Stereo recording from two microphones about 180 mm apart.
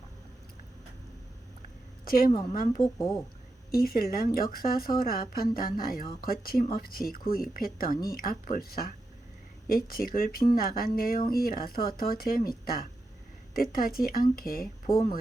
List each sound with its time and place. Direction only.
2.0 s speech: 55° left (ahead or behind)